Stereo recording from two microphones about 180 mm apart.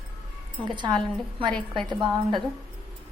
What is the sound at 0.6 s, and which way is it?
A woman's voice, 25° right (ahead or behind).